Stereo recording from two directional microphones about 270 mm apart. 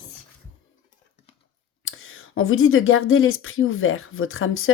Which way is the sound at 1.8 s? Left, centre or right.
Left.